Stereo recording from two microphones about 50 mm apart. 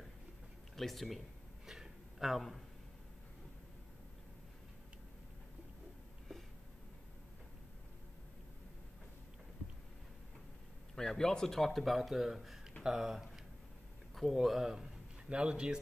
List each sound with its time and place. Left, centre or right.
0.7 s speech: centre
1.7 s a sound: centre
11.0 s a man's voice: centre